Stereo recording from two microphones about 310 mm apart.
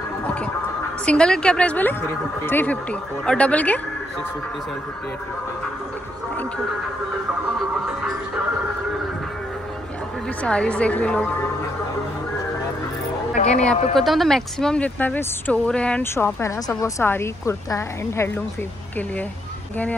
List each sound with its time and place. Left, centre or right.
1.0 s speech: centre
10.4 s speech: centre
13.3 s speech: left
13.9 s speech: centre